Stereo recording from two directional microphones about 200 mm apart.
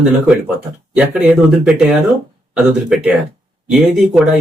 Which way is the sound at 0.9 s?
5° right (ahead or behind).